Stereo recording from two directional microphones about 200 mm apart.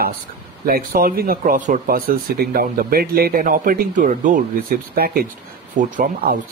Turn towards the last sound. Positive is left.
turn(degrees=-45)  # may be behind; listen again after turning